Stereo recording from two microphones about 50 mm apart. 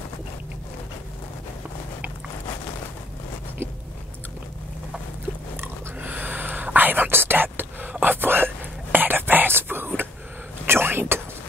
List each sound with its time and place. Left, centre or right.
5.9 s whispering: right